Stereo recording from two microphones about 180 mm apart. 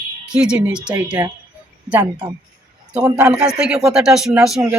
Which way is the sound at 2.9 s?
5° right (ahead or behind).